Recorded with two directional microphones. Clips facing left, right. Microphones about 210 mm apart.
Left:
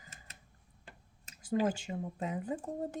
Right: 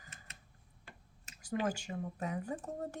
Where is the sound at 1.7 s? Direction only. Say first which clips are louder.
Left 2 dB; 20° left (ahead or behind).